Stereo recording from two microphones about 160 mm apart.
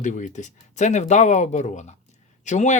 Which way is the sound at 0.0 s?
50° left (ahead or behind).